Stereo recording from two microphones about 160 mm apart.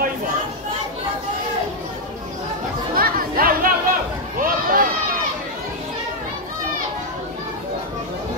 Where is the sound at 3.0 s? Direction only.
65° right (ahead or behind).